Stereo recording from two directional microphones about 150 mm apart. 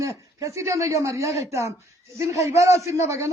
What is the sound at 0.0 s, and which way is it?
Speech, 20° right (ahead or behind).